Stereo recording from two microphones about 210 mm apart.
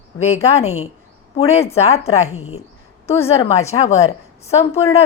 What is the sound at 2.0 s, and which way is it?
Speech, 90° left.